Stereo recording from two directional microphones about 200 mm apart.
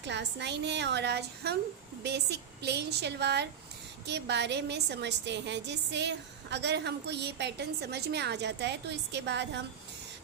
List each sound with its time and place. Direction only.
0.0 s a woman's voice: 60° right (ahead or behind)